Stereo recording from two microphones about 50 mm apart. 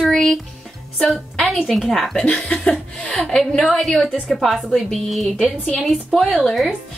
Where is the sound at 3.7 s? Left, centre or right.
Centre.